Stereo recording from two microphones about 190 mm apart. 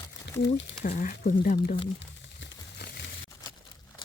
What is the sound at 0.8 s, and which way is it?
Speech, 40° left (ahead or behind).